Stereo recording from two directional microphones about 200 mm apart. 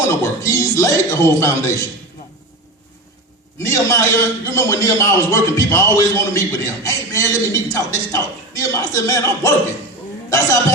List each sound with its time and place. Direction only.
0.1 s a man's voice: 15° left (ahead or behind)
3.6 s a man's voice: 15° left (ahead or behind)